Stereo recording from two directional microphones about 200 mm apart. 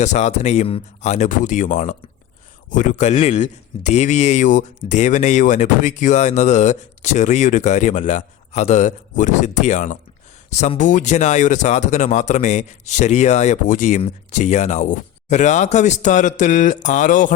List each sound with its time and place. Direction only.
0.0 s speech: 35° left (ahead or behind)